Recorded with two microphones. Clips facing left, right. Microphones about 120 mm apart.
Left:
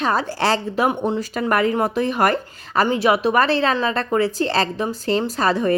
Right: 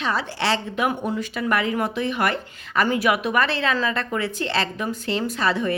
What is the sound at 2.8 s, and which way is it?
Speech, 25° left (ahead or behind).